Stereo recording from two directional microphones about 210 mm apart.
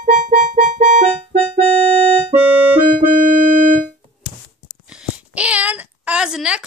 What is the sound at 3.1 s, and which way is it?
Keyboard, 40° right (ahead or behind).